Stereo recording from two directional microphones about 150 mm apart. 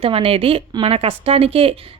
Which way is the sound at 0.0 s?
40° right (ahead or behind).